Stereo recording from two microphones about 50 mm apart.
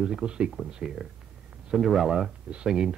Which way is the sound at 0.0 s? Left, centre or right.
Centre.